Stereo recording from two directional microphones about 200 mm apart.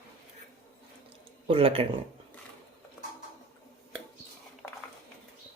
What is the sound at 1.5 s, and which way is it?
Speech, 30° right (ahead or behind).